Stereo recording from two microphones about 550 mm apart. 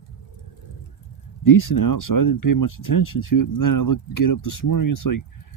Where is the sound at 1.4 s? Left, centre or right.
Left.